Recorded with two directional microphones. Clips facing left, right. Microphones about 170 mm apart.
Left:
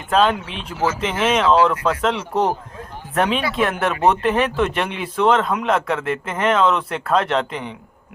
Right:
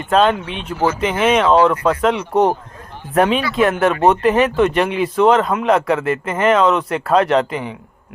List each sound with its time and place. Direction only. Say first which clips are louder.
0.1 s speech: right 3 dB; centre (ahead or behind)
1.5 s speech: right 3 dB; 40° right (ahead or behind)
1.8 s speech: right 4 dB; 5° right (ahead or behind)